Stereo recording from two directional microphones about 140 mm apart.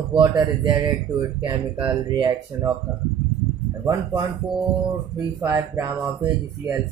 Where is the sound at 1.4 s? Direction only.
35° right (ahead or behind).